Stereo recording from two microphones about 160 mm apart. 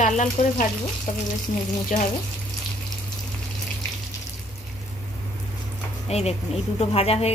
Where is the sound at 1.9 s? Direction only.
50° left (ahead or behind).